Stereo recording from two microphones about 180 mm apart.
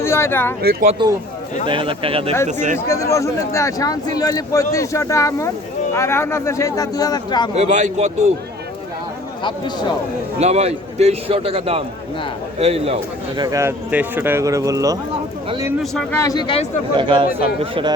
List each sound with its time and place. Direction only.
0.0 s speech: 15° left (ahead or behind)
0.6 s speech: 60° right (ahead or behind)
1.6 s speech: 30° right (ahead or behind)
2.5 s a man's voice: 40° right (ahead or behind)
2.7 s speech: 15° left (ahead or behind)
7.5 s a man's voice: 40° right (ahead or behind)
10.3 s a man's voice: 35° right (ahead or behind); by 15.7 s 20° right (ahead or behind)
16.1 s speech: 20° left (ahead or behind)
16.9 s speech: 30° right (ahead or behind)